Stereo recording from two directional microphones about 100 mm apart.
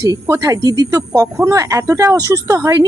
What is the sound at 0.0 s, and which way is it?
Speech, 35° right (ahead or behind).